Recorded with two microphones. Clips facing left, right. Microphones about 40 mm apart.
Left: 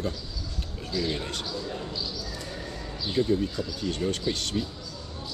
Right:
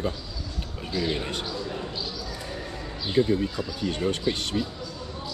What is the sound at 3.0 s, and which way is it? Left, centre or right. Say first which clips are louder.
Speech: right 2 dB; right.